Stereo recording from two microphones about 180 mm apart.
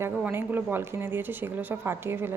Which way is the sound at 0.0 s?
10° right (ahead or behind).